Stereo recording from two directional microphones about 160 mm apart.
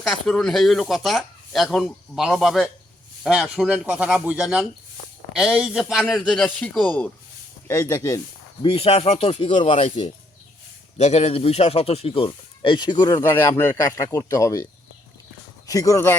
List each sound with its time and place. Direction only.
0.0 s speech: centre (ahead or behind)
7.7 s speech: 20° left (ahead or behind)
8.6 s speech: 40° left (ahead or behind)
10.9 s speech: 45° left (ahead or behind); by 16.1 s 20° left (ahead or behind)